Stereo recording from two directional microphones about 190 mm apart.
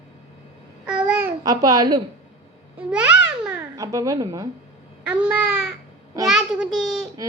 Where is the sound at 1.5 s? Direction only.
20° right (ahead or behind).